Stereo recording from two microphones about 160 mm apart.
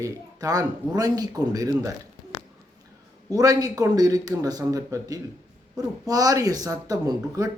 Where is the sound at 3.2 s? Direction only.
20° right (ahead or behind).